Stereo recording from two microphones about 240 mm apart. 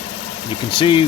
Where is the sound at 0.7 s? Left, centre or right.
Left.